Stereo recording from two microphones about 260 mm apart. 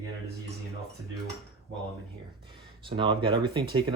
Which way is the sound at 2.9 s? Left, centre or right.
Centre.